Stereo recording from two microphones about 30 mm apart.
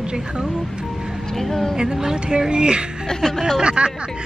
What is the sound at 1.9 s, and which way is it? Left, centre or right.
Speech, right.